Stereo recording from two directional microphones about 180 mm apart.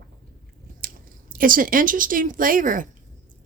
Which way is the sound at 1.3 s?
50° right (ahead or behind).